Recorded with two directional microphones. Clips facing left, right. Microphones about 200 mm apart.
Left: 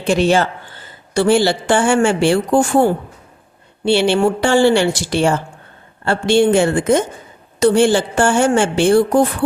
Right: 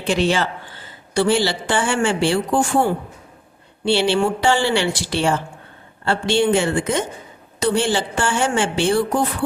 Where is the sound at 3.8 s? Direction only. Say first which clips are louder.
Left 4 dB; 50° left (ahead or behind).